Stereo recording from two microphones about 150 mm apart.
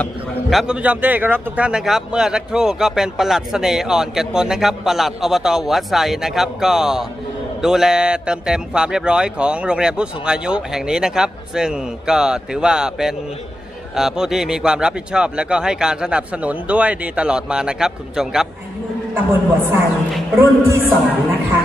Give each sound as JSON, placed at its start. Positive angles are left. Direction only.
{"t": 0.0, "sound": "a man's voice", "side_deg": 0}
{"t": 19.1, "sound": "a man's voice", "side_deg": -15}